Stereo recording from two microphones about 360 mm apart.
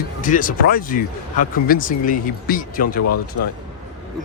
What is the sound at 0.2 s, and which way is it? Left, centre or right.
Speech, left.